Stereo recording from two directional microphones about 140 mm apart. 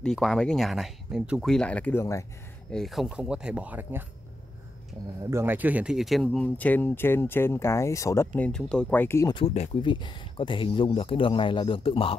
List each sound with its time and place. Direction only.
0.0 s speech: 5° left (ahead or behind)
1.4 s speech: 5° left (ahead or behind)
2.7 s speech: centre (ahead or behind)
5.3 s speech: 15° right (ahead or behind); by 8.3 s 20° left (ahead or behind)
8.4 s speech: 5° left (ahead or behind)
9.3 s speech: 40° left (ahead or behind)